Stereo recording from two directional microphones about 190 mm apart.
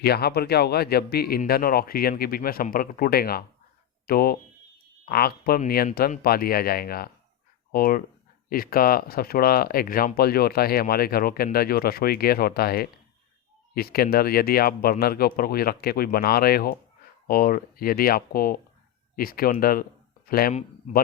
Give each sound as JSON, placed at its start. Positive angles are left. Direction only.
{"t": 0.0, "sound": "speech", "side_deg": 55}